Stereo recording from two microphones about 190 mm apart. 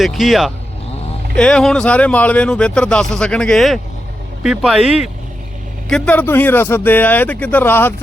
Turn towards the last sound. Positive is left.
turn(degrees=10)  # may be behind; listen again after turning